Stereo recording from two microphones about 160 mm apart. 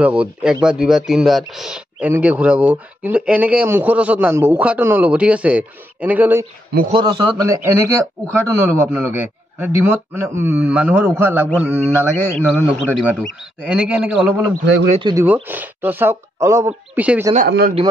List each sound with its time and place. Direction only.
0.0 s speech: 10° right (ahead or behind)
6.9 s a man's voice: 30° right (ahead or behind); by 14.4 s 5° right (ahead or behind)
14.9 s speech: 30° right (ahead or behind)
15.1 s speech: 10° right (ahead or behind)
17.5 s speech: 85° right